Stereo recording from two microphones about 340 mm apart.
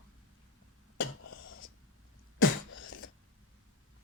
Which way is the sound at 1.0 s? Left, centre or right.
Left.